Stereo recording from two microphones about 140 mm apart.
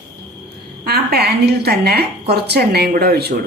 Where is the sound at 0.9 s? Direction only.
90° right.